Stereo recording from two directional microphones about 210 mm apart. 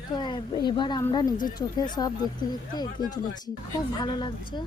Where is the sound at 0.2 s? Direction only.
20° left (ahead or behind).